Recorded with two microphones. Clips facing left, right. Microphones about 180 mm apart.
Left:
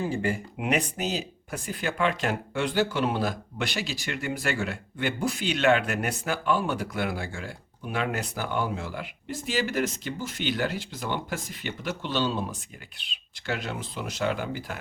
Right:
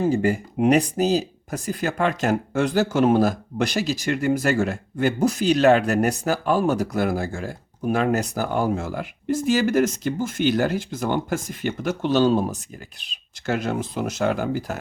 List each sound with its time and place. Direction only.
0.0 s speech: 40° right (ahead or behind)